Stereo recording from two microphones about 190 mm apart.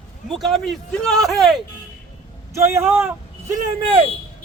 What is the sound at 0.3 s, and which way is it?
Speech, centre (ahead or behind).